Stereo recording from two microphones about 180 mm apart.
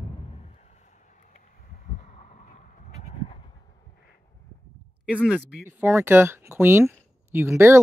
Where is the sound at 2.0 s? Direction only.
40° left (ahead or behind).